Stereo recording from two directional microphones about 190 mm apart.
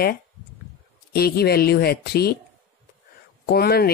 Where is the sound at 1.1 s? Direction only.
55° left (ahead or behind).